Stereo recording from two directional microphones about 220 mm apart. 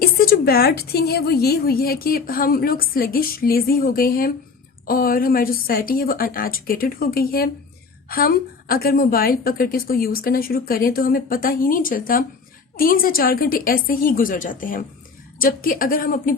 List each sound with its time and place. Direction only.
0.0 s a woman's voice: 45° left (ahead or behind)